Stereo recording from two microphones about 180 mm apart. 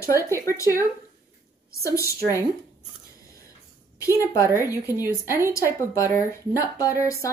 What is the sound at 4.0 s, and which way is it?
Speech, 20° left (ahead or behind).